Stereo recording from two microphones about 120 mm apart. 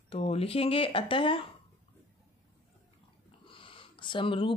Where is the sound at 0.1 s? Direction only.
55° left (ahead or behind).